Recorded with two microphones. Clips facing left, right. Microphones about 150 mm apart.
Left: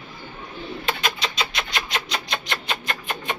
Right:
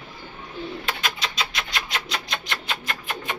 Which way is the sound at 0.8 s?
Centre (ahead or behind).